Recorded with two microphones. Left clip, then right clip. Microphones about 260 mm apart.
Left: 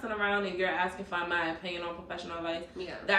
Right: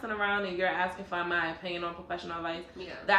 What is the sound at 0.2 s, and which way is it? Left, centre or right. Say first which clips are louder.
A man's voice: even; centre.